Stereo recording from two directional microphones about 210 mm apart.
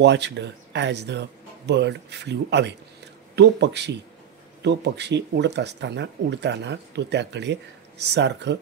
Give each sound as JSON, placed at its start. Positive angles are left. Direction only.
{"t": 0.0, "sound": "speech", "side_deg": -55}